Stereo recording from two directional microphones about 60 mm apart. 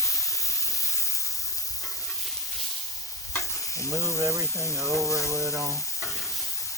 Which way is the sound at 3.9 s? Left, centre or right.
Right.